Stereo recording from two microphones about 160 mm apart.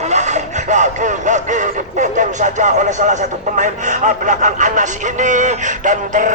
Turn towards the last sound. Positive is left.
turn(degrees=-50)  # may be behind; listen again after turning